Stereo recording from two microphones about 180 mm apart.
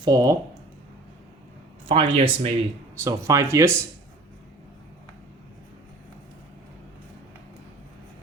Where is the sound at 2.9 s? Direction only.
15° right (ahead or behind).